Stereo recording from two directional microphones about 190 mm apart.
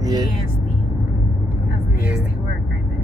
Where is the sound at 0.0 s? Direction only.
20° right (ahead or behind).